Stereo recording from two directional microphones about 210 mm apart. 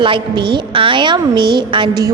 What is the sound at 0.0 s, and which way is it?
A woman's voice, 25° right (ahead or behind).